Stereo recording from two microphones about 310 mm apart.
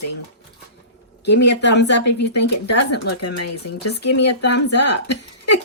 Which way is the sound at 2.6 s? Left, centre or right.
Left.